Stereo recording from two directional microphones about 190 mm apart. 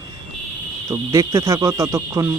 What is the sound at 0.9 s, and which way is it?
Speech, 15° right (ahead or behind).